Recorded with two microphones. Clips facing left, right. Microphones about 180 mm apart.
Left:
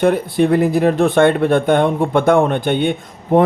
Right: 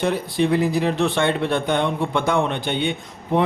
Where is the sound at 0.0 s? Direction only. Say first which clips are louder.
Left 6 dB; 50° left (ahead or behind).